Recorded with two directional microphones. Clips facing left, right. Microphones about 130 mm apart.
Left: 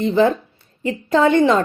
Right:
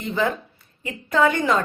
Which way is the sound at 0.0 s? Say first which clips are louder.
Left 8 dB; 25° left (ahead or behind).